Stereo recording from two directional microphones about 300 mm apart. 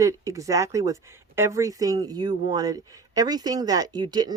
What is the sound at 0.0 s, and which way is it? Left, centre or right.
Speech, centre.